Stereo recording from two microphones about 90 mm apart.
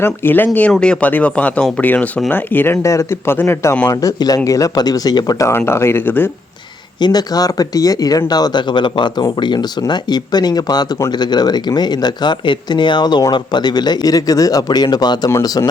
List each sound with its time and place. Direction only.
0.0 s speech: 25° left (ahead or behind)
2.8 s a man's voice: 35° left (ahead or behind)
3.8 s speech: 45° left (ahead or behind)
5.5 s speech: 30° left (ahead or behind)
7.0 s speech: 50° left (ahead or behind)